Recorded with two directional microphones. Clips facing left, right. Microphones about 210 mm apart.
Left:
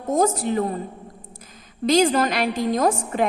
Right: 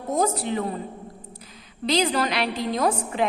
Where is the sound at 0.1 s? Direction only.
45° left (ahead or behind).